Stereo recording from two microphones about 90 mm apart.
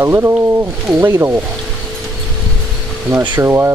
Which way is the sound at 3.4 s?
30° right (ahead or behind).